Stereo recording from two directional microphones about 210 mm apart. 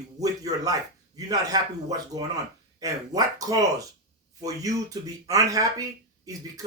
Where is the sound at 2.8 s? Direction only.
15° right (ahead or behind).